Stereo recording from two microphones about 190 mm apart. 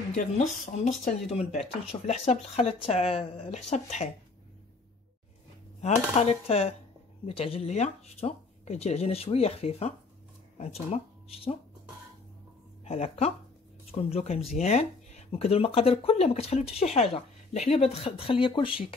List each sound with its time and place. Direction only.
1.3 s speech: 35° left (ahead or behind)
5.8 s speech: 35° left (ahead or behind)
12.8 s speech: 35° left (ahead or behind)